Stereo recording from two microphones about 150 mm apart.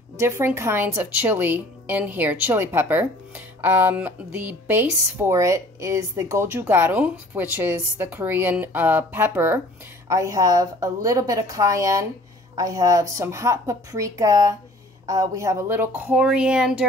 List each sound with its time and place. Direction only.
0.2 s a woman's voice: 15° right (ahead or behind)